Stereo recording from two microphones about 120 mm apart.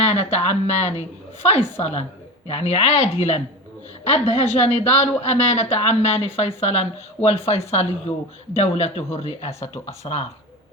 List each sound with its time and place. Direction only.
0.0 s speech: 60° left (ahead or behind)
9.6 s speech: 20° left (ahead or behind)
10.0 s speech: 60° left (ahead or behind)